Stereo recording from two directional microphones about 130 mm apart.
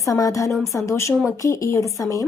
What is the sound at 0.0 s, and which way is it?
Speech, 25° left (ahead or behind).